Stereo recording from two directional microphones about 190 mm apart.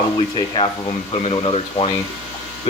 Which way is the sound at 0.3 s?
25° left (ahead or behind).